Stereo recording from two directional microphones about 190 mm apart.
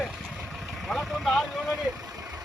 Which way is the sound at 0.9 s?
Centre (ahead or behind).